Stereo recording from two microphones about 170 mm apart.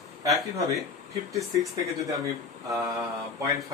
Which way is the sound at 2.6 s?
20° right (ahead or behind).